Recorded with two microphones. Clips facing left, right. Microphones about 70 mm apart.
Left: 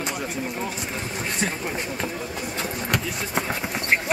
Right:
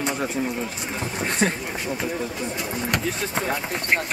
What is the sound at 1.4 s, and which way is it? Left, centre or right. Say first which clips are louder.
Speech: right 5 dB; right.